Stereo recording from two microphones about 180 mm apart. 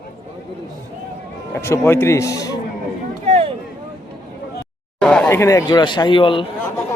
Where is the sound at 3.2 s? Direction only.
35° right (ahead or behind).